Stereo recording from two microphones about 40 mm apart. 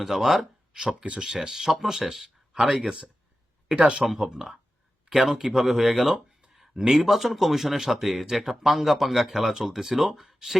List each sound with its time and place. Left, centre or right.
0.0 s speech: centre
3.7 s speech: right
4.0 s speech: centre
5.0 s speech: centre